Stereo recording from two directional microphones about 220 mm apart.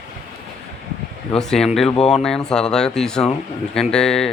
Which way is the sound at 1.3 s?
Centre (ahead or behind).